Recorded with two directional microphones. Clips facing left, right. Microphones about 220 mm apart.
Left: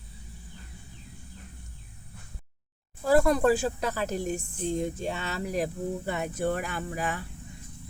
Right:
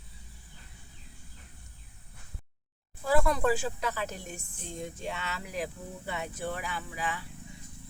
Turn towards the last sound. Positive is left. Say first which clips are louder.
# left 4 dB
turn(degrees=50)  # may be behind; listen again after turning